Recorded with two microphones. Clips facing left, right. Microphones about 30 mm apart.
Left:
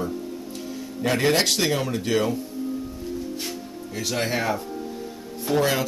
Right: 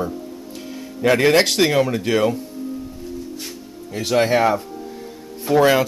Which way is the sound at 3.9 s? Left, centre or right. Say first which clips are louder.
Right 9 dB; right.